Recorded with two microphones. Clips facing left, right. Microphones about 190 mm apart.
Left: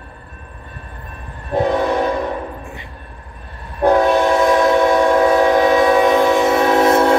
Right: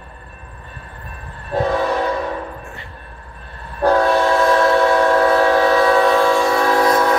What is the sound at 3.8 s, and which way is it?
Train, 20° left (ahead or behind).